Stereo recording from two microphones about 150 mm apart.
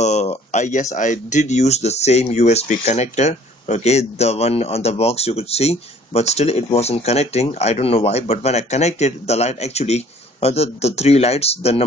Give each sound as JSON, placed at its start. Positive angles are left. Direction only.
{"t": 0.0, "sound": "speech", "side_deg": 50}